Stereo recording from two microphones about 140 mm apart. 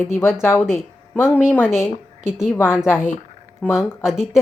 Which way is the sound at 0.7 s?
15° left (ahead or behind).